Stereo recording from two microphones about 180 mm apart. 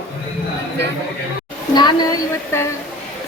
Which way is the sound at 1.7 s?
25° left (ahead or behind).